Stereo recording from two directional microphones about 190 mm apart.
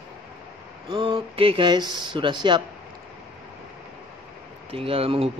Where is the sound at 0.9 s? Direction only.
25° right (ahead or behind).